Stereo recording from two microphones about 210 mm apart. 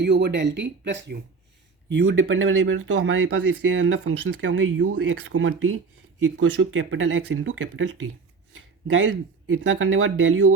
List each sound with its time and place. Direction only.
0.0 s speech: 55° right (ahead or behind); by 2.9 s 70° right (ahead or behind)
3.1 s speech: 80° right